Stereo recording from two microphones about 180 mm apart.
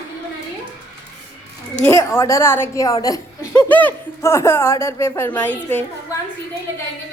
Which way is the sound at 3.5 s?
10° left (ahead or behind).